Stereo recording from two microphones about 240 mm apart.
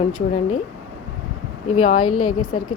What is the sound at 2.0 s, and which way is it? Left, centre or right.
Speech, left.